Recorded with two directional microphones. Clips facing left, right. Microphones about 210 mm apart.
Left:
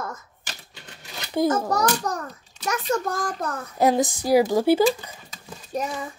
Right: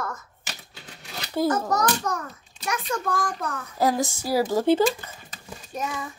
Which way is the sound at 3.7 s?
20° left (ahead or behind).